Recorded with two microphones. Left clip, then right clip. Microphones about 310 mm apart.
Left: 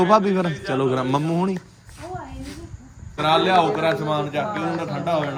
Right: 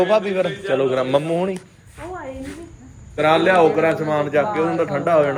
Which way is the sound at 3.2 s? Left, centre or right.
Centre.